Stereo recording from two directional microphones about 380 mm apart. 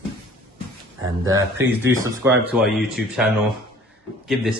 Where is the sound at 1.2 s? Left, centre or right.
Centre.